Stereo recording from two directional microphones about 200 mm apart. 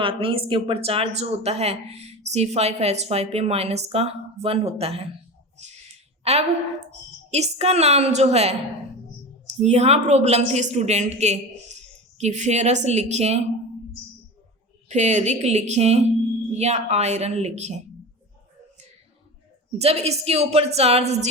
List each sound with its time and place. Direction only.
0.0 s speech: 25° right (ahead or behind)
5.6 s a sound: 35° right (ahead or behind)
6.3 s speech: 30° right (ahead or behind)
14.8 s speech: 35° right (ahead or behind)
19.8 s speech: 30° right (ahead or behind)